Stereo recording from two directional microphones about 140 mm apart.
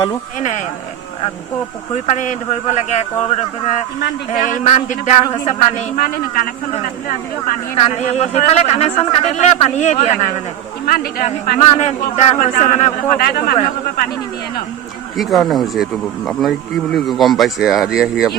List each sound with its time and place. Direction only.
0.3 s speech: 60° left (ahead or behind)
2.0 s speech: 60° left (ahead or behind)
4.3 s speech: 65° left (ahead or behind)
6.0 s a man's voice: 90° left
7.8 s speech: 50° left (ahead or behind)
10.8 s a man's voice: 90° left
11.6 s speech: 50° left (ahead or behind)
12.4 s speech: 60° left (ahead or behind)
13.1 s a man's voice: 90° left
15.1 s speech: centre (ahead or behind)